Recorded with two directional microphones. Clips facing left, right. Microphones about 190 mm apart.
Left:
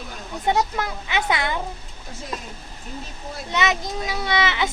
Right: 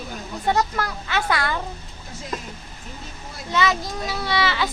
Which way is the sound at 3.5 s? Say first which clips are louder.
Right 1 dB; 20° left (ahead or behind).